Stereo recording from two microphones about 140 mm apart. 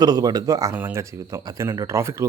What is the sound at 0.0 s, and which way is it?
Speech, 30° right (ahead or behind).